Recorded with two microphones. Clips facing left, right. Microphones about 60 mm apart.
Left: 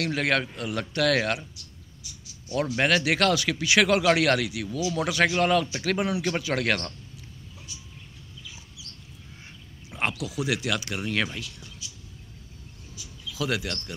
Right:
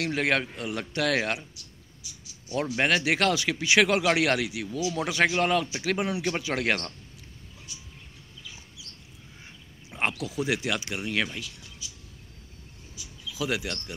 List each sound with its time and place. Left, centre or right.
0.0 s speech: right
2.5 s speech: centre
9.8 s a sound: right
10.1 s speech: right
11.0 s speech: centre
12.9 s a sound: centre